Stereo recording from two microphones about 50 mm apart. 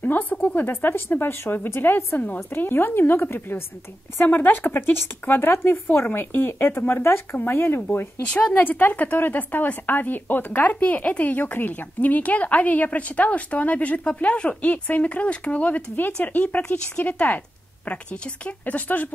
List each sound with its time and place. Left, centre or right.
0.0 s a woman's voice: left
0.8 s speech: left
5.5 s speech: left
6.0 s a woman's voice: left
17.8 s speech: left